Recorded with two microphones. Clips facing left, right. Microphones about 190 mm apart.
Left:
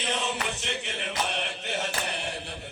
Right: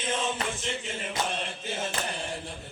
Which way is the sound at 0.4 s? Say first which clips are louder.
Even; 70° left (ahead or behind).